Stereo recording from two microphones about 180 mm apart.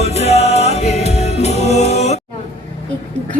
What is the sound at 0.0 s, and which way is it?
Music, 35° left (ahead or behind).